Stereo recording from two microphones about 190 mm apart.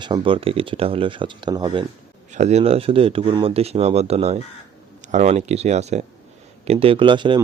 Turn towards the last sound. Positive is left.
turn(degrees=-25)  # may be behind; listen again after turning